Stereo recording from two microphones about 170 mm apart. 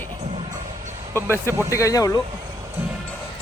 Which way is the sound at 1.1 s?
15° left (ahead or behind).